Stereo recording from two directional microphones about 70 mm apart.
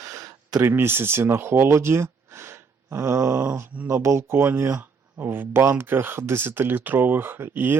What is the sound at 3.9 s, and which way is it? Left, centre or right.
Speech, right.